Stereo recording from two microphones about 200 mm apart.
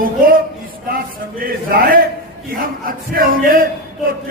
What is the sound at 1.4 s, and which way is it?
A man's voice, 45° right (ahead or behind).